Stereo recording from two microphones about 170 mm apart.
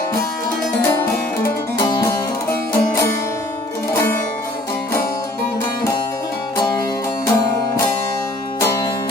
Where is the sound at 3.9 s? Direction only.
15° left (ahead or behind).